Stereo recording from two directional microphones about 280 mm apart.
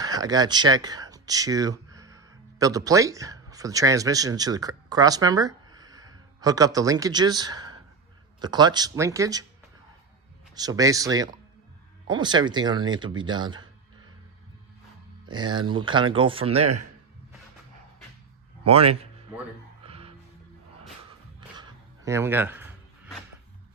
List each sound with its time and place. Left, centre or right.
0.0 s speech: centre
10.5 s speech: centre
15.3 s speech: centre
18.6 s a man's voice: right
19.8 s music: centre
21.6 s a sound: centre